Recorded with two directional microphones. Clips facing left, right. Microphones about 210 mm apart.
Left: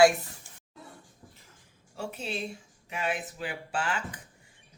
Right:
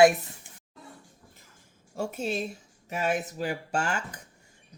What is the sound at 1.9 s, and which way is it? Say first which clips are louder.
Speech: right 5 dB; 45° right (ahead or behind).